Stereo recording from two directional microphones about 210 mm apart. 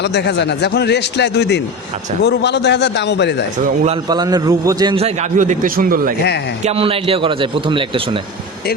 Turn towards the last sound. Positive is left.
turn(degrees=-25)  # may be behind; listen again after turning